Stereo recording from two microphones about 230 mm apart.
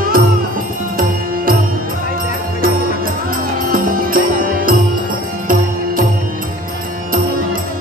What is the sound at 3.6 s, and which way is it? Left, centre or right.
Music, right.